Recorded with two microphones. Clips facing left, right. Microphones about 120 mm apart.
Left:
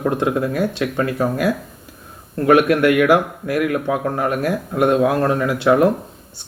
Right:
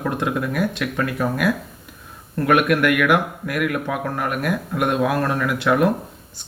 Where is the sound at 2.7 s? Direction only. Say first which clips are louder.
Left 4 dB; 30° left (ahead or behind).